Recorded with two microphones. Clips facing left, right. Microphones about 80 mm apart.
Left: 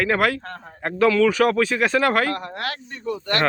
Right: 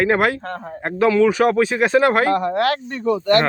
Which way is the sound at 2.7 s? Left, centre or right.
Right.